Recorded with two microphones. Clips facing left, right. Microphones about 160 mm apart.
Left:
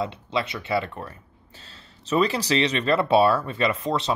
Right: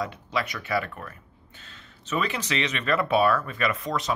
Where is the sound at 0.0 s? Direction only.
25° left (ahead or behind).